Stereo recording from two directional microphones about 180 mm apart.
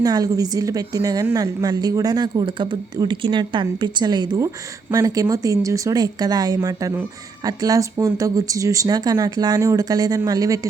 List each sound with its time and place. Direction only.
0.0 s a woman's voice: 20° right (ahead or behind)